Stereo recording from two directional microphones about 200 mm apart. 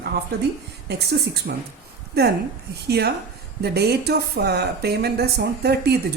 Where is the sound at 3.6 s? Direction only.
55° right (ahead or behind).